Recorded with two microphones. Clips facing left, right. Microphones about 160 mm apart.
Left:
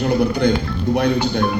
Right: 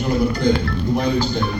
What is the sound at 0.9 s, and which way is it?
Speech, 65° left (ahead or behind).